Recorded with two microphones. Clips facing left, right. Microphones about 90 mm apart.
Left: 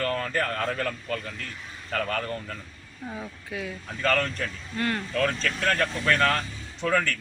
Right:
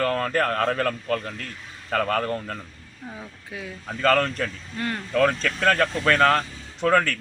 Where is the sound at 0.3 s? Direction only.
70° right (ahead or behind).